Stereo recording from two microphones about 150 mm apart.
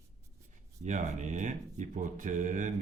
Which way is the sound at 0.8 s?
55° right (ahead or behind).